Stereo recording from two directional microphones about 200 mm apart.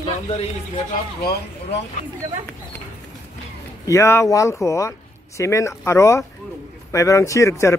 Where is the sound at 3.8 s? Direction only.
15° left (ahead or behind).